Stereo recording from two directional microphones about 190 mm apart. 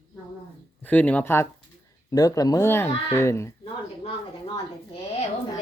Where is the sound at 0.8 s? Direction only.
10° left (ahead or behind).